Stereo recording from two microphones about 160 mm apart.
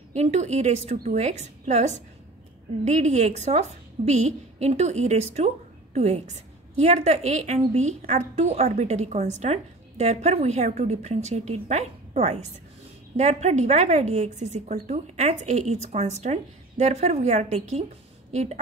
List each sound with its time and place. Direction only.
0.1 s a woman's voice: 45° right (ahead or behind)